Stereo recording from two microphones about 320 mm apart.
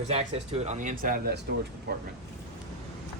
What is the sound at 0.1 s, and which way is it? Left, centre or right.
Speech, centre.